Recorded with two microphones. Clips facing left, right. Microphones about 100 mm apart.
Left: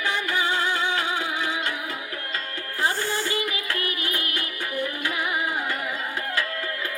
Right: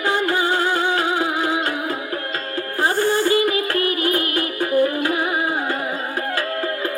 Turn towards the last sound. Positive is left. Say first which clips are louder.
# right 10 dB
turn(degrees=-40)  # may be behind; listen again after turning